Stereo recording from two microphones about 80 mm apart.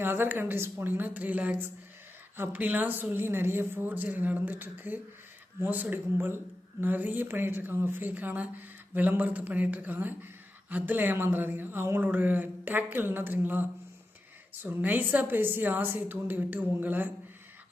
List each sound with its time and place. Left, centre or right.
0.0 s speech: right